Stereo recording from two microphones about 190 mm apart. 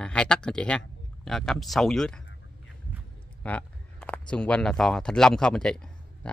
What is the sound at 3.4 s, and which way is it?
Speech, 5° left (ahead or behind).